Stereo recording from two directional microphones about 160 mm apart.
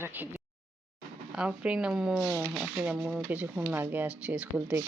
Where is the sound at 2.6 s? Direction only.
5° right (ahead or behind).